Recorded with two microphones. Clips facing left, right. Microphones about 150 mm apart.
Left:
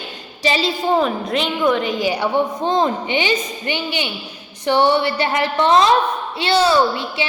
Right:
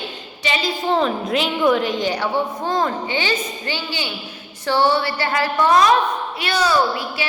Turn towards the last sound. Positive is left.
turn(degrees=25)  # may be behind; listen again after turning